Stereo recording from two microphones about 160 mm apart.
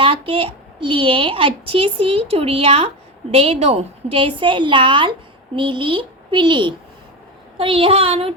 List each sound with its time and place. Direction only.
0.0 s a woman's voice: 35° right (ahead or behind)